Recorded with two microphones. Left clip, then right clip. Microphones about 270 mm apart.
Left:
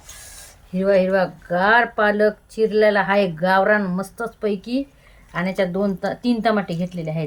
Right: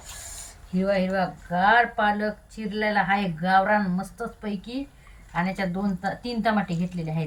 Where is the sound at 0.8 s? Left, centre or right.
Centre.